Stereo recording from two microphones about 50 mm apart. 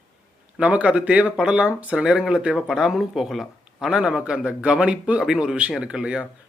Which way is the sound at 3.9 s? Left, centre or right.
Centre.